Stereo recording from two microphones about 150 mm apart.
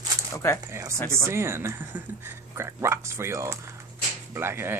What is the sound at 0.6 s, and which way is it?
Speech, 20° right (ahead or behind).